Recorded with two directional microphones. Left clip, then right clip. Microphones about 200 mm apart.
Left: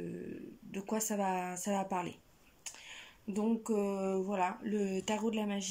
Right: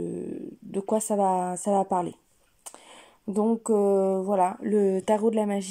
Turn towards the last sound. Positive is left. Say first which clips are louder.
# right 11 dB
turn(degrees=-35)  # may be behind; listen again after turning